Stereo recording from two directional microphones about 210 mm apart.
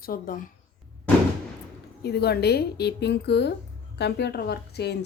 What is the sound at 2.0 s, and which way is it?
A woman's voice, 50° left (ahead or behind).